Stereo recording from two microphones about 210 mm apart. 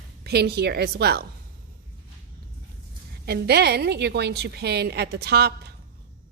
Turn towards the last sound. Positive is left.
turn(degrees=-50)  # may be behind; listen again after turning